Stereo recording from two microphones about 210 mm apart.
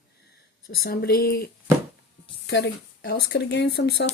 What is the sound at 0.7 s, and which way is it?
Speech, 50° left (ahead or behind).